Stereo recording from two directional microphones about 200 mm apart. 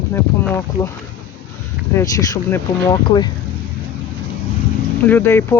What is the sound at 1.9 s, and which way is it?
Speech, 15° left (ahead or behind).